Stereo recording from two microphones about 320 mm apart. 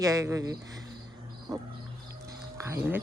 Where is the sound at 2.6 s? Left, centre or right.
Centre.